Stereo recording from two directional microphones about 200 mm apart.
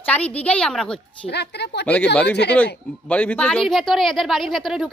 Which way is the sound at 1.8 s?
5° left (ahead or behind).